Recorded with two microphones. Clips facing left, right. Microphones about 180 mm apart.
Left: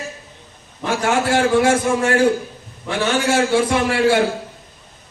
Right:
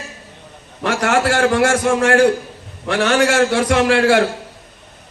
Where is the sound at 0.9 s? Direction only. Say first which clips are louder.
Right 2 dB; 80° right.